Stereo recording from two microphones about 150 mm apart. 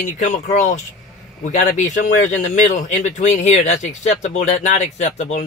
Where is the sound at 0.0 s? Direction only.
55° left (ahead or behind).